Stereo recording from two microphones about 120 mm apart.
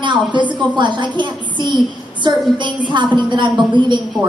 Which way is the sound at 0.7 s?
40° right (ahead or behind).